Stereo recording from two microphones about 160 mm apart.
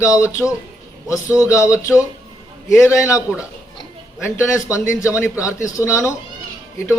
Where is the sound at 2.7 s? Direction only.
15° left (ahead or behind).